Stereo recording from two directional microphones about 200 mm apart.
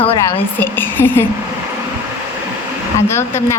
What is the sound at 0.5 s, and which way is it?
Speech, 10° left (ahead or behind).